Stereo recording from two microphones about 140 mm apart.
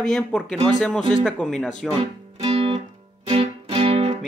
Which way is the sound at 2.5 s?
50° right (ahead or behind).